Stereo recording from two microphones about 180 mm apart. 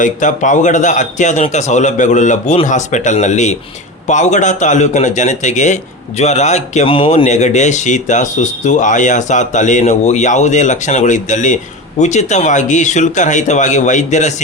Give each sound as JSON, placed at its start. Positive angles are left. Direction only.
{"t": 0.0, "sound": "a man's voice", "side_deg": 45}